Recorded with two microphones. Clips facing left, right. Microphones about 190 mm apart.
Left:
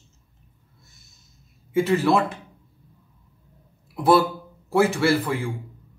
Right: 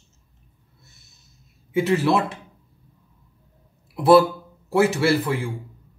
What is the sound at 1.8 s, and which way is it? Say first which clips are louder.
Speech: even; centre (ahead or behind).